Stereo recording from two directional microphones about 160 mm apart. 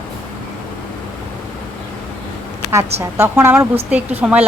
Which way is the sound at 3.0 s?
15° right (ahead or behind).